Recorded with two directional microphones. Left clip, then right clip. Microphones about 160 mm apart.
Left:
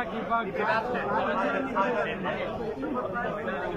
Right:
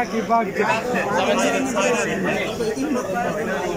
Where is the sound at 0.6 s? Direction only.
25° right (ahead or behind).